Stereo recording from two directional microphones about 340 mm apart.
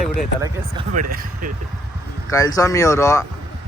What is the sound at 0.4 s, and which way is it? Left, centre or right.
Speech, centre.